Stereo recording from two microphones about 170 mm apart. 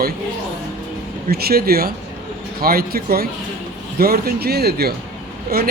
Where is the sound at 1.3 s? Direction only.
65° right (ahead or behind).